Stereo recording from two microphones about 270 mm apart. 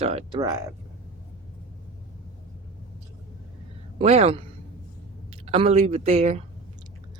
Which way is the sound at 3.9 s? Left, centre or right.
Right.